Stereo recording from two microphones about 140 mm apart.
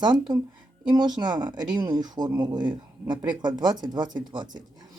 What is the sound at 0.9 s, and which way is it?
Speech, 30° right (ahead or behind).